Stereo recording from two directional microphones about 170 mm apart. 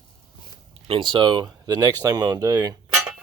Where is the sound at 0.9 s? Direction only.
30° right (ahead or behind).